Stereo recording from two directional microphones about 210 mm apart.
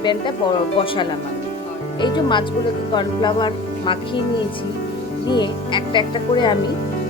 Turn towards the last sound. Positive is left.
turn(degrees=20)  # may be behind; listen again after turning